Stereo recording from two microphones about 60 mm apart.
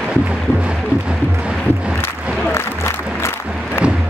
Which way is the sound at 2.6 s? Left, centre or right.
Left.